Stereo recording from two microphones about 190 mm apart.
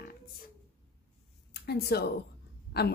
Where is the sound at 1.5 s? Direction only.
60° left (ahead or behind).